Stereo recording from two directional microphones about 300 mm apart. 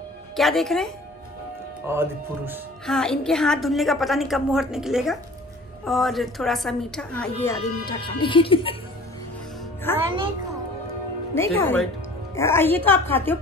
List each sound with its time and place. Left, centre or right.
0.4 s a woman's voice: centre
7.8 s a woman's voice: centre
9.9 s a woman's voice: centre
11.3 s a woman's voice: centre